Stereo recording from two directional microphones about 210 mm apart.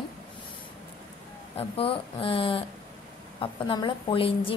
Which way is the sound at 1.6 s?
25° left (ahead or behind).